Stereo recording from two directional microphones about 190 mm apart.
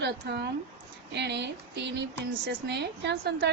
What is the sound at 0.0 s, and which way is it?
A woman's voice, 65° right (ahead or behind).